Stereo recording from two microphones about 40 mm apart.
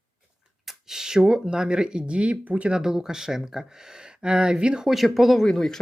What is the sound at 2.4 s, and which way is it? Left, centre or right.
Speech, right.